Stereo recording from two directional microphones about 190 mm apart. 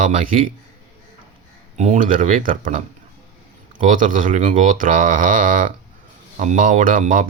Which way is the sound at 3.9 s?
45° right (ahead or behind).